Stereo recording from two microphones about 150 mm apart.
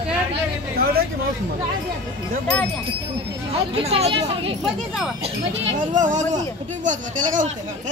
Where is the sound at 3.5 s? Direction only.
40° right (ahead or behind).